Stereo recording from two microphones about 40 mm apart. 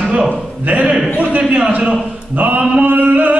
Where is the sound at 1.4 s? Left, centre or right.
Right.